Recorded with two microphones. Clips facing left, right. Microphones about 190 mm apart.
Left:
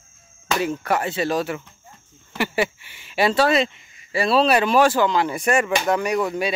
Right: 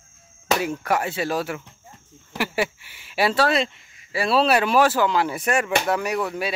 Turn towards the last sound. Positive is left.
turn(degrees=-5)  # may be behind; listen again after turning